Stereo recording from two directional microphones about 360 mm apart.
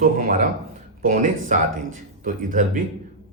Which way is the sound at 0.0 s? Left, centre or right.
Right.